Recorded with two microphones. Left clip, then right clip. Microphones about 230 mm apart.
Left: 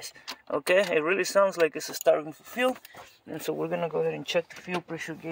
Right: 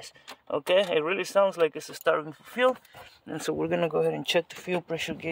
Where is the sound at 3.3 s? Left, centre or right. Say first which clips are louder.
Right 1 dB; centre.